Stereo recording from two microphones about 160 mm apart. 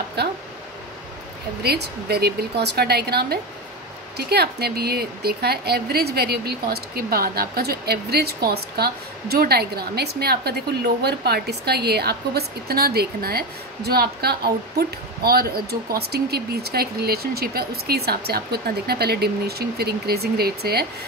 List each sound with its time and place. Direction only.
0.2 s a woman's voice: 90° right
1.6 s a woman's voice: 90° right